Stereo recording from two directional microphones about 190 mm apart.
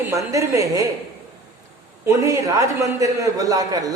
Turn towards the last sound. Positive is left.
turn(degrees=-20)  # may be behind; listen again after turning